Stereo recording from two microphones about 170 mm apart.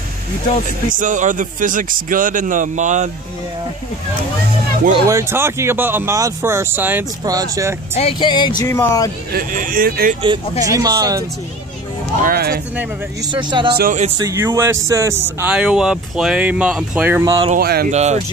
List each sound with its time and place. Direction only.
0.7 s speech: 50° right (ahead or behind)
5.0 s speech: 15° right (ahead or behind)
7.2 s speech: 20° right (ahead or behind)
7.9 s speech: 35° left (ahead or behind)
8.6 s speech: 15° left (ahead or behind)
9.3 s speech: 55° right (ahead or behind)
10.7 s speech: 20° right (ahead or behind)
12.2 s speech: 60° right (ahead or behind)
13.3 s speech: 25° right (ahead or behind)
15.4 s speech: 5° right (ahead or behind)
17.2 s speech: 20° right (ahead or behind)
17.6 s speech: 65° right (ahead or behind)
17.9 s speech: 40° right (ahead or behind)